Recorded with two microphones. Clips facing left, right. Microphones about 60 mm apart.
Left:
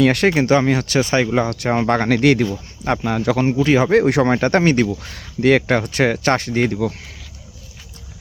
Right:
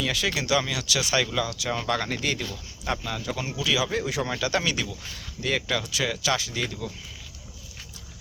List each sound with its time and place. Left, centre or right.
0.0 s speech: left
0.3 s speech: left
2.0 s speech: left
2.8 s speech: left
5.4 s speech: left